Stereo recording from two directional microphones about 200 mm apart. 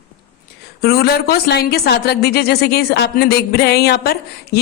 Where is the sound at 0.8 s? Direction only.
50° left (ahead or behind).